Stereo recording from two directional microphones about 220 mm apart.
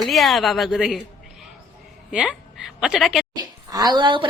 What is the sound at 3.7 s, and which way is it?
Speech, 20° right (ahead or behind).